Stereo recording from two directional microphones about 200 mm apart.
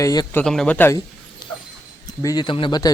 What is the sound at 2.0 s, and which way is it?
Speech, 20° left (ahead or behind).